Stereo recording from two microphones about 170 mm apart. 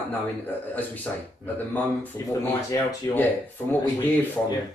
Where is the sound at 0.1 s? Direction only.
10° left (ahead or behind).